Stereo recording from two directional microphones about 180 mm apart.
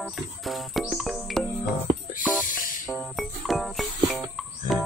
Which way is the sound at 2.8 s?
Centre (ahead or behind).